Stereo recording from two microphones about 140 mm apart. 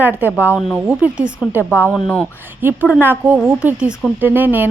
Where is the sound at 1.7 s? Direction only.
15° left (ahead or behind).